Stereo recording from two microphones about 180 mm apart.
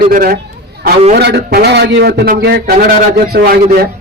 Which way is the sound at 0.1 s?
50° right (ahead or behind).